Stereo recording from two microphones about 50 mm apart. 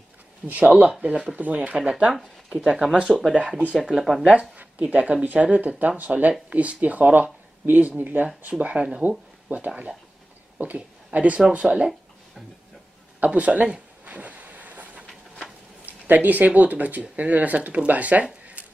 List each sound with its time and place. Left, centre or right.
0.5 s speech: right
2.5 s speech: centre
4.3 s speech: right
11.1 s speech: right
13.2 s a sound: right
15.8 s speech: right